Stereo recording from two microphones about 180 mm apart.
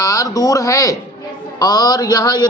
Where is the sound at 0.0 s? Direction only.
20° left (ahead or behind).